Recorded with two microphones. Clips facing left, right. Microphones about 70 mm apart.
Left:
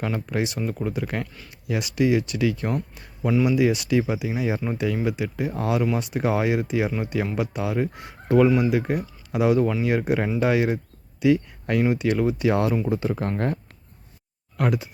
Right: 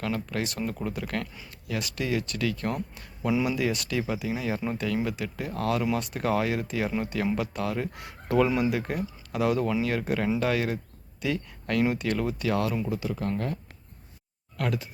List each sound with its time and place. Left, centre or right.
0.0 s speech: centre
2.7 s speech: centre
8.7 s speech: centre
12.4 s speech: left
14.5 s speech: centre